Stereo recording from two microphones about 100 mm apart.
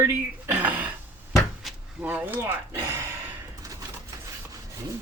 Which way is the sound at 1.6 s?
Centre (ahead or behind).